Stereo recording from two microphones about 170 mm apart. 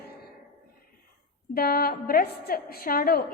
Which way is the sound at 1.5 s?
60° left (ahead or behind).